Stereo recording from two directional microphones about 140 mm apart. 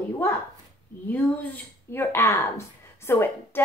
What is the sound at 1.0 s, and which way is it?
Speech, 10° left (ahead or behind).